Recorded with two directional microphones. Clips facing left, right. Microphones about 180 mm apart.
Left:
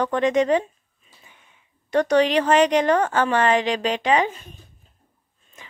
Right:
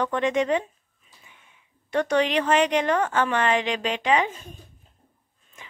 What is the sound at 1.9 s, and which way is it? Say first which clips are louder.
Speech: left 4 dB; 40° left (ahead or behind).